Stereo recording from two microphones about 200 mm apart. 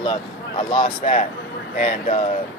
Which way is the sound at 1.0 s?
35° left (ahead or behind).